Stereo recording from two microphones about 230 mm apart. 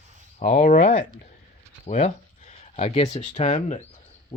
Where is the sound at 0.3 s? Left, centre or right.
Left.